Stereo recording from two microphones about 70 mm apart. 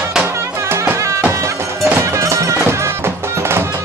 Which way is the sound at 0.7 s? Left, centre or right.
Right.